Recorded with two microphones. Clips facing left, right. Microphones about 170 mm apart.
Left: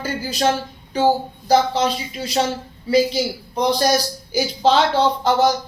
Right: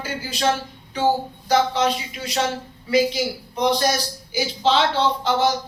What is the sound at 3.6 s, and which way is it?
A woman's voice, 35° left (ahead or behind).